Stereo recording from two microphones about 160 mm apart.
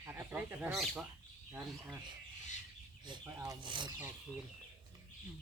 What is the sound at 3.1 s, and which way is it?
Speech, 25° right (ahead or behind).